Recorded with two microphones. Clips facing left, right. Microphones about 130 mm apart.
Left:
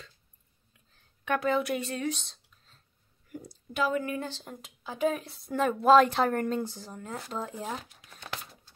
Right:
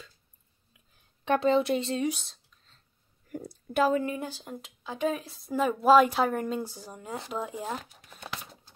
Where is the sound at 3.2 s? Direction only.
45° right (ahead or behind).